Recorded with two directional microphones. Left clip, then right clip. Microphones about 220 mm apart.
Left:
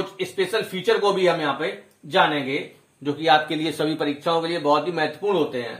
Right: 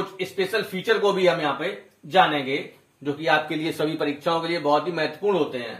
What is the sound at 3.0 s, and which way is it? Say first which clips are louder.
Speech: left 3 dB; 25° left (ahead or behind).